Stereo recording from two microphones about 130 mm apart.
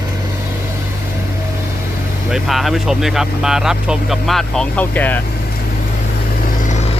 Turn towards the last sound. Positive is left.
turn(degrees=15)  # may be behind; listen again after turning